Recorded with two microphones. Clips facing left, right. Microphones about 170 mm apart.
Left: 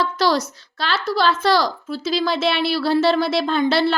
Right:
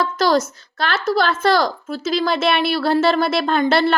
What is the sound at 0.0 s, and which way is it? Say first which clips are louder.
A child's voice: right 2 dB; 45° right (ahead or behind).